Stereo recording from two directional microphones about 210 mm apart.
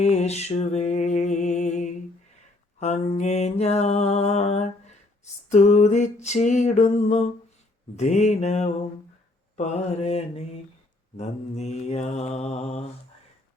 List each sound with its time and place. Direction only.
0.0 s music: 30° left (ahead or behind)
2.8 s mantra: 30° left (ahead or behind)